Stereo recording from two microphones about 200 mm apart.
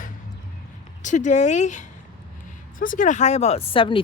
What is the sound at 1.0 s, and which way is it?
Speech, 35° left (ahead or behind).